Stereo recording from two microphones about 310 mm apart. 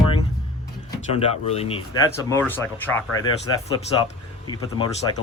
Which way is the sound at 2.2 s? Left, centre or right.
Centre.